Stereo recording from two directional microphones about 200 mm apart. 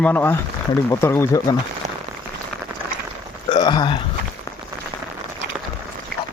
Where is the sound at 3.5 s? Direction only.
20° left (ahead or behind).